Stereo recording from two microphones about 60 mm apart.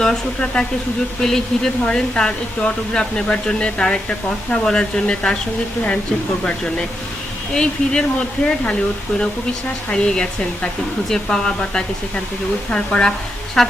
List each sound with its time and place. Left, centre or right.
0.0 s speech: centre
6.4 s speech: centre
9.9 s speech: centre